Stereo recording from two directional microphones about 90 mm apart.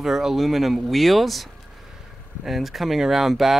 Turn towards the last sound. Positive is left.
turn(degrees=-5)  # may be behind; listen again after turning